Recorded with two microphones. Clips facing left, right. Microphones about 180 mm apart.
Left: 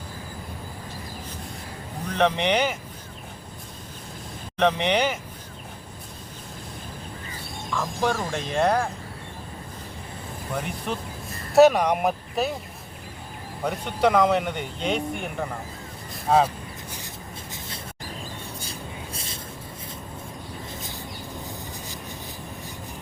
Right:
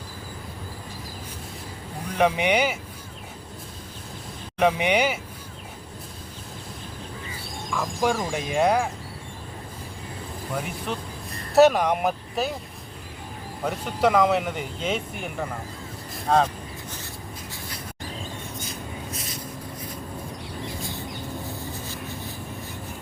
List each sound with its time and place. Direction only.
2.0 s speech: 10° right (ahead or behind)
4.5 s speech: 10° right (ahead or behind)
7.7 s speech: 10° right (ahead or behind)
10.5 s speech: centre (ahead or behind)
13.7 s speech: centre (ahead or behind)
18.6 s a sound: 30° left (ahead or behind)
21.4 s a sound: 15° left (ahead or behind)